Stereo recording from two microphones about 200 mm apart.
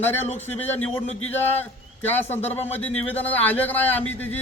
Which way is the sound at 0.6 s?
10° left (ahead or behind).